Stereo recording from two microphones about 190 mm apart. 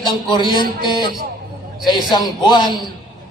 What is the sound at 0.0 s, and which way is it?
Speech, 25° left (ahead or behind).